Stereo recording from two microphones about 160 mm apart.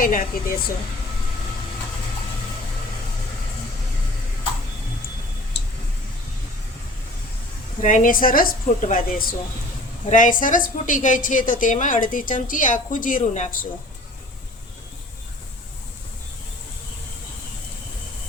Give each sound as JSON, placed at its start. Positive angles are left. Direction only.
{"t": 0.0, "sound": "a woman's voice", "side_deg": 60}
{"t": 7.8, "sound": "a woman's voice", "side_deg": 50}